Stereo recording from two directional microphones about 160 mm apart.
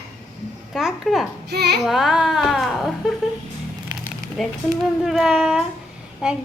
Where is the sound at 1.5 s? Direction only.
90° right.